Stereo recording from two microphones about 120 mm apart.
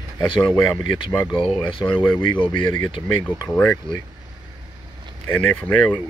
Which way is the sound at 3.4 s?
10° left (ahead or behind).